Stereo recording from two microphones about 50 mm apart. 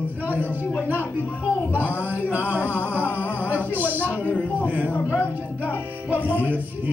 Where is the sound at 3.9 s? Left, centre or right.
Left.